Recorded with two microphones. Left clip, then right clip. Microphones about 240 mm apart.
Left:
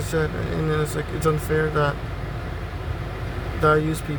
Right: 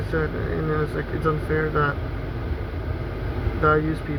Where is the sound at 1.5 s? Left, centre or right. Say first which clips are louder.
Even; centre.